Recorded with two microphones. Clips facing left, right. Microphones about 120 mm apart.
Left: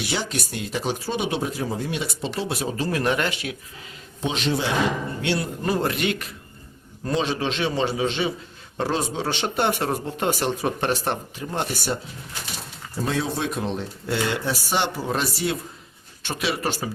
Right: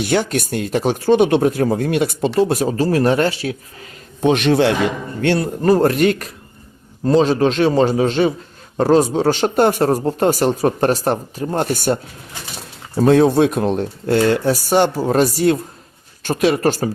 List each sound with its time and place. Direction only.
0.0 s speech: 55° right (ahead or behind)
2.4 s speech: 45° right (ahead or behind)
4.2 s a man's voice: 60° right (ahead or behind)
5.2 s speech: 45° right (ahead or behind)
13.0 s speech: 55° right (ahead or behind)